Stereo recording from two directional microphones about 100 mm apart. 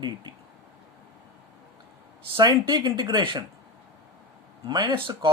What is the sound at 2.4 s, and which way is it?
Speech, 45° right (ahead or behind).